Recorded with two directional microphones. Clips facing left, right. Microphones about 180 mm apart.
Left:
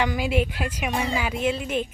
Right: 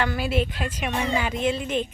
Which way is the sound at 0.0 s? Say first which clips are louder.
Left 1 dB; 15° left (ahead or behind).